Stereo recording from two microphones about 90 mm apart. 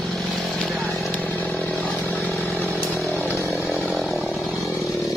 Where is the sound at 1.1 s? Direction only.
20° left (ahead or behind).